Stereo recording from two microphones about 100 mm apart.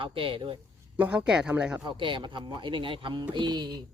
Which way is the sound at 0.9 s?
15° right (ahead or behind).